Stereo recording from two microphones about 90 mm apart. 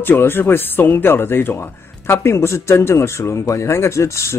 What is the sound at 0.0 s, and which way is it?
Speech, 25° left (ahead or behind).